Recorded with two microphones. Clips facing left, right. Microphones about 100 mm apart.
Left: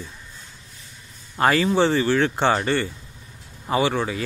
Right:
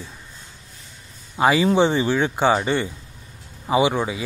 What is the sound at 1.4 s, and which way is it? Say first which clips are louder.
Speech: right 2 dB; 10° right (ahead or behind).